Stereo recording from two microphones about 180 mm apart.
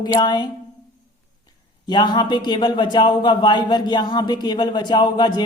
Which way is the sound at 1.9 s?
25° left (ahead or behind).